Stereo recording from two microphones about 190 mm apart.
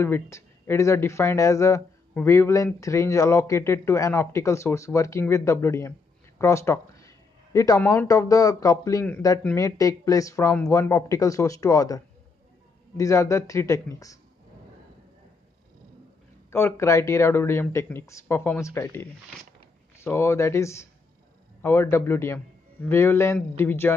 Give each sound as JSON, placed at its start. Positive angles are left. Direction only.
{"t": 0.0, "sound": "speech", "side_deg": 10}
{"t": 16.4, "sound": "speech", "side_deg": 15}